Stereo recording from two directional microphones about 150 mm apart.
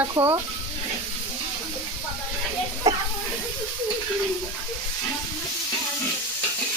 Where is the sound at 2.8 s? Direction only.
25° right (ahead or behind).